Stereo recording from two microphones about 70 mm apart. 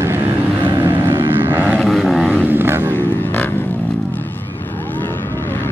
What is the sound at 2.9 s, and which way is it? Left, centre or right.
Vehicle, left.